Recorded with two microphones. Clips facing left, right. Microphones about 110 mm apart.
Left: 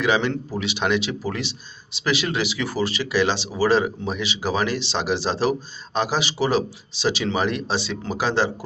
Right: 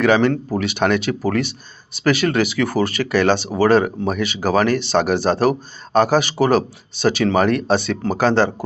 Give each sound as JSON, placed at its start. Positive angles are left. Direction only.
{"t": 0.0, "sound": "speech", "side_deg": -50}